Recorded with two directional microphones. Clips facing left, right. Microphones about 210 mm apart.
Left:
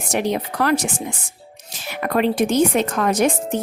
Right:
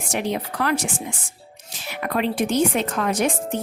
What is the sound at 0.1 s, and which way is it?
Speech, 40° left (ahead or behind).